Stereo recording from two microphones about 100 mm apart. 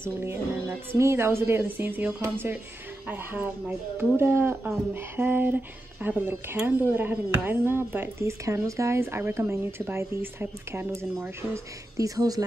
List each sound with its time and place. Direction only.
0.0 s speech: 25° right (ahead or behind)